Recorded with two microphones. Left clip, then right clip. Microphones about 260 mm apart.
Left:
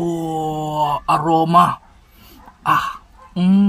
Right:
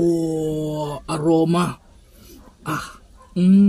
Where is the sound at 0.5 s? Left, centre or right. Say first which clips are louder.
Left 7 dB; left.